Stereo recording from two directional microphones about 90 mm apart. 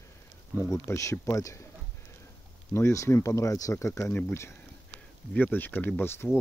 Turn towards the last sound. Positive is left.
turn(degrees=25)  # may be behind; listen again after turning